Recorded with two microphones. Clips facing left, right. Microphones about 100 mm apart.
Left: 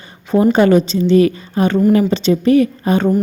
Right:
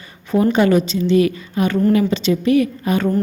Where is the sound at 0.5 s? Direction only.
35° left (ahead or behind).